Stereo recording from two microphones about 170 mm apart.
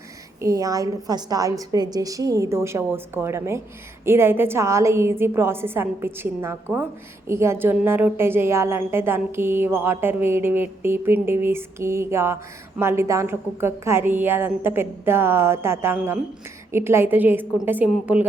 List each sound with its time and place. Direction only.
0.4 s a woman's voice: 20° right (ahead or behind)